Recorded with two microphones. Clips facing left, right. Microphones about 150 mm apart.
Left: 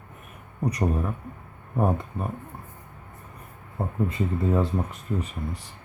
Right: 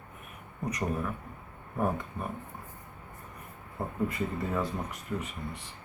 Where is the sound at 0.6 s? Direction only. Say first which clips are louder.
Left 6 dB; 35° left (ahead or behind).